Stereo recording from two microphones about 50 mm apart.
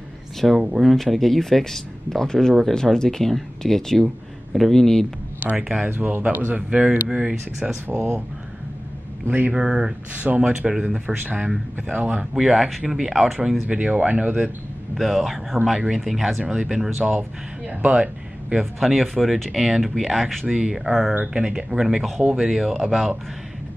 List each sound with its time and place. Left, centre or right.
0.4 s speech: centre
5.4 s speech: right
6.7 s speech: right
7.9 s speech: right
9.5 s speech: centre
10.1 s speech: right
12.4 s speech: centre
13.7 s speech: right
15.0 s speech: centre
16.4 s speech: centre
18.6 s speech: centre
20.4 s speech: centre
21.3 s speech: centre
21.8 s speech: centre